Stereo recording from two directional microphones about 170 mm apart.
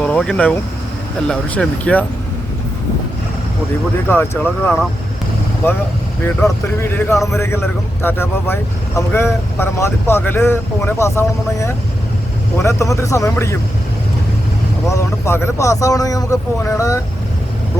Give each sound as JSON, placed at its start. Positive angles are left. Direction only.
{"t": 0.0, "sound": "speech", "side_deg": 5}
{"t": 4.1, "sound": "speech", "side_deg": 15}
{"t": 5.6, "sound": "speech", "side_deg": 15}
{"t": 14.8, "sound": "speech", "side_deg": 15}